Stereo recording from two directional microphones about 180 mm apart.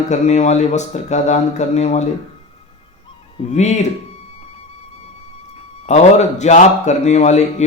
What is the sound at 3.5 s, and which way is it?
Speech, 40° left (ahead or behind).